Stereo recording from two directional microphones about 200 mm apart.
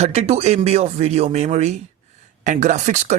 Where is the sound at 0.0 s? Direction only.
30° right (ahead or behind).